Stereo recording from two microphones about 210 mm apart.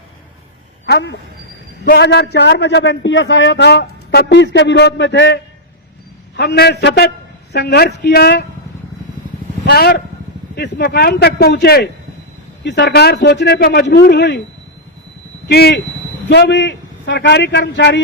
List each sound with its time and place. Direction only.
0.9 s a man's voice: 55° left (ahead or behind)
9.6 s speech: 50° left (ahead or behind)
15.4 s a man's voice: 50° left (ahead or behind)